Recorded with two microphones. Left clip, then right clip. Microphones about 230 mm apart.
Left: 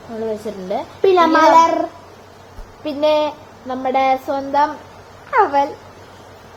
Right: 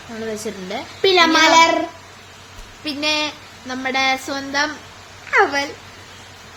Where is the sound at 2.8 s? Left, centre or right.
Centre.